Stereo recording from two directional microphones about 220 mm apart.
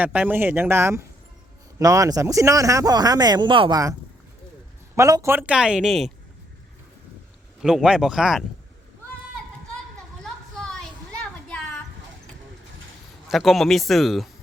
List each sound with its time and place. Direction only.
0.0 s speech: 5° right (ahead or behind)
4.9 s speech: 15° right (ahead or behind)
7.6 s speech: 5° right (ahead or behind)
10.2 s a sound: centre (ahead or behind)
13.2 s speech: centre (ahead or behind)